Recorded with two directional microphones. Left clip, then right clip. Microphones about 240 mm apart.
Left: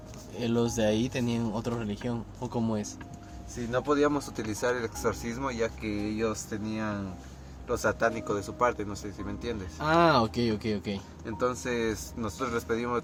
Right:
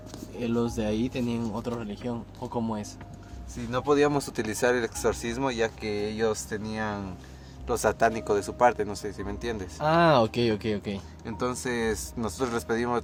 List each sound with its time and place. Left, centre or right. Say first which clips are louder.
0.3 s speech: left 1 dB; centre
3.7 s speech: right 3 dB; right
9.7 s speech: right 2 dB; centre
10.2 s speech: right 3 dB; right
11.3 s speech: even; right